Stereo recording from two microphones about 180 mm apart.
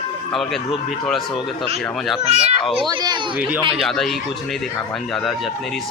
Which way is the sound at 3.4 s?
10° right (ahead or behind).